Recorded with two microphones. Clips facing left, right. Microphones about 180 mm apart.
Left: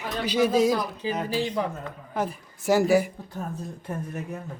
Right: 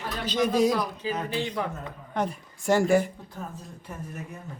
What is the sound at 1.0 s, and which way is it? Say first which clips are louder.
Speech: left 4 dB; 30° left (ahead or behind).